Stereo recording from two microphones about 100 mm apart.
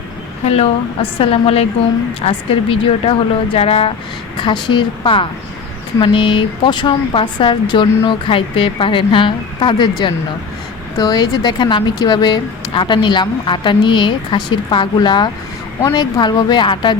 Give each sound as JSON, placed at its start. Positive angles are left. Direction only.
{"t": 0.4, "sound": "a woman's voice", "side_deg": 90}
{"t": 1.2, "sound": "speech", "side_deg": 75}
{"t": 4.4, "sound": "a woman's voice", "side_deg": 50}
{"t": 10.9, "sound": "speech", "side_deg": 40}
{"t": 15.8, "sound": "speech", "side_deg": 40}